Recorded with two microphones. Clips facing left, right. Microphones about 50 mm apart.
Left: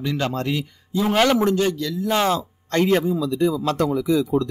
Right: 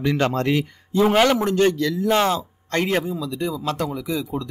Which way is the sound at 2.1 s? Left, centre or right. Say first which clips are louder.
Even; centre.